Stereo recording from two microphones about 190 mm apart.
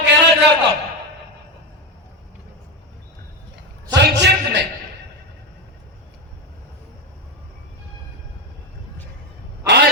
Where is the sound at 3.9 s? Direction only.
65° right (ahead or behind).